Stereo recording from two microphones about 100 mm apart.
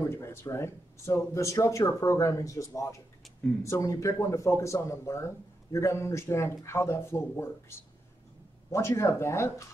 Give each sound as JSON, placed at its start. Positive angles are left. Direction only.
{"t": 0.0, "sound": "speech", "side_deg": 25}
{"t": 8.6, "sound": "speech", "side_deg": 30}